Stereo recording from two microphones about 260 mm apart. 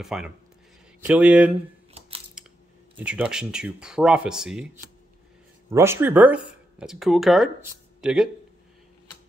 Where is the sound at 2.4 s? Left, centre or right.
Centre.